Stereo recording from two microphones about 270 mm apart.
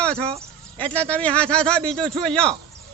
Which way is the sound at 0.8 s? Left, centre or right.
Centre.